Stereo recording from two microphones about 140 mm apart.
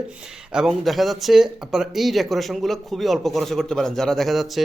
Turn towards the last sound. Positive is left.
turn(degrees=0)  # may be behind; listen again after turning